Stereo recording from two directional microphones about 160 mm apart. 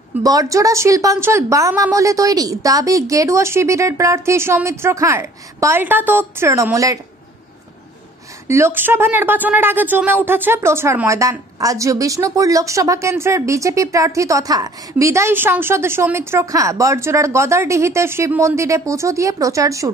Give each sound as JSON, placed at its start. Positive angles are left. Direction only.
{"t": 0.2, "sound": "speech", "side_deg": -20}
{"t": 8.5, "sound": "speech", "side_deg": -15}